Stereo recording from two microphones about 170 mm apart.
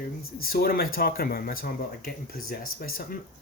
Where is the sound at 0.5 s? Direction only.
60° left (ahead or behind).